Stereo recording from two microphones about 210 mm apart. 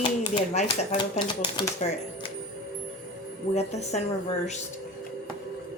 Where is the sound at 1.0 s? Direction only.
20° left (ahead or behind).